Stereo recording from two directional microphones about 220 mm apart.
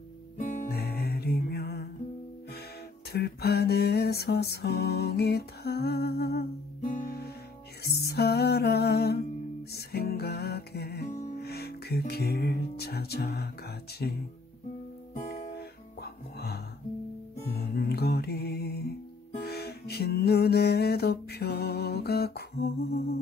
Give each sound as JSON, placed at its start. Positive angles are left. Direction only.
{"t": 0.4, "sound": "music", "side_deg": 35}
{"t": 3.1, "sound": "music", "side_deg": 45}
{"t": 15.1, "sound": "music", "side_deg": 30}
{"t": 15.5, "sound": "music", "side_deg": 45}